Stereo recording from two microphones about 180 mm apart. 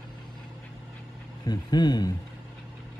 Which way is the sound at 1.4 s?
20° left (ahead or behind).